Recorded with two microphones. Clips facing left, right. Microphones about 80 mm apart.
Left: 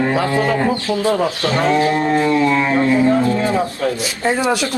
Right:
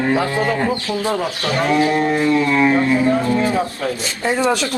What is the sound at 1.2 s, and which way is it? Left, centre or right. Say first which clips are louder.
Speech: left 3 dB; left.